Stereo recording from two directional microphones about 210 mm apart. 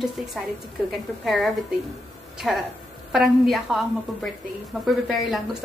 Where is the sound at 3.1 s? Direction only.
Centre (ahead or behind).